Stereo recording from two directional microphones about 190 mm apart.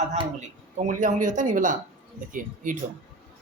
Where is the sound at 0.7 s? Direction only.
40° right (ahead or behind).